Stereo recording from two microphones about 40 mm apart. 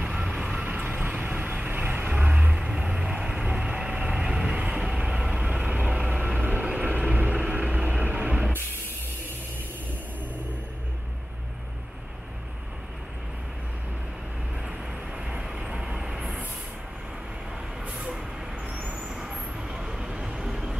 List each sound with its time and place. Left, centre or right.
0.0 s vehicle: centre
0.7 s vehicle: right
1.0 s vehicle: right
2.5 s vehicle: centre
5.5 s vehicle: right
6.6 s train: right
6.9 s vehicle: right
8.1 s a sound: right
15.5 s vehicle: centre
17.9 s vehicle: centre
18.7 s vehicle: right
18.9 s vehicle: centre
20.4 s vehicle: centre